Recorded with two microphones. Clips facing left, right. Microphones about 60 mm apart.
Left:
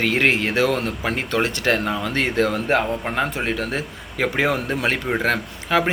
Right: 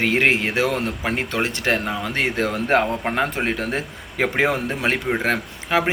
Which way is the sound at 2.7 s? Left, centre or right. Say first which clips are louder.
Right 1 dB; right.